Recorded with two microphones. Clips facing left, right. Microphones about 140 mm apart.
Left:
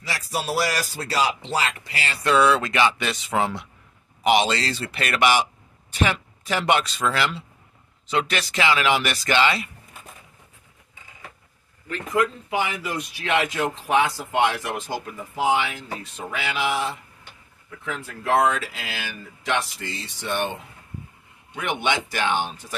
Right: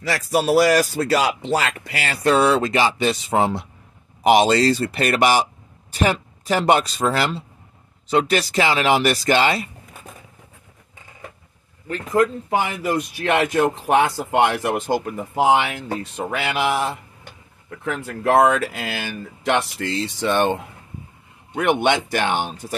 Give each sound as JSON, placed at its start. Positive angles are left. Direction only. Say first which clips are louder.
{"t": 0.0, "sound": "speech", "louder": "right 8 dB", "side_deg": -55}
{"t": 11.9, "sound": "speech", "louder": "right 4 dB", "side_deg": -40}
{"t": 21.5, "sound": "speech", "louder": "right 7 dB", "side_deg": -55}